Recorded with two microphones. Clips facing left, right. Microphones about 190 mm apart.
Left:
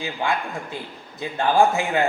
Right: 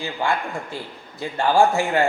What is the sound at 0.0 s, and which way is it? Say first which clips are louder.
A man's voice: right 1 dB; 20° left (ahead or behind).